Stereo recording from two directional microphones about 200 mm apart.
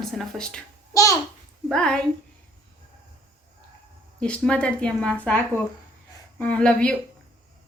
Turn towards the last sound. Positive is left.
turn(degrees=5)  # may be behind; listen again after turning